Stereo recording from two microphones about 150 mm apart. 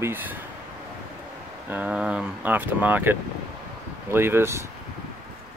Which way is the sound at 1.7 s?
10° right (ahead or behind).